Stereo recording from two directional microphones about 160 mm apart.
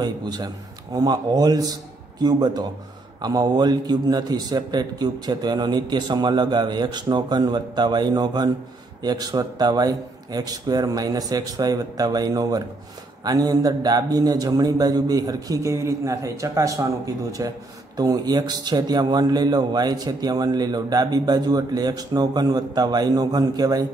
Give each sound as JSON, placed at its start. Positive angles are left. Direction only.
{"t": 0.0, "sound": "a man's voice", "side_deg": -25}